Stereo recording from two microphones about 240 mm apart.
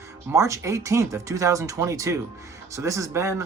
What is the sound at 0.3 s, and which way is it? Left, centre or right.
Speech, centre.